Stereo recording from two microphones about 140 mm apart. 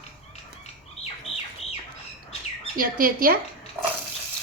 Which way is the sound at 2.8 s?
90° right.